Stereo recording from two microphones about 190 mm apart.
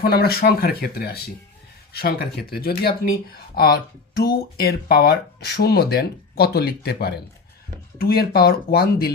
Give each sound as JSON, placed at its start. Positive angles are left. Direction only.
{"t": 0.0, "sound": "speech", "side_deg": 55}